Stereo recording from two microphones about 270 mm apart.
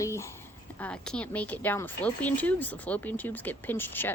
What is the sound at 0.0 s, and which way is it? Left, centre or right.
Speech, centre.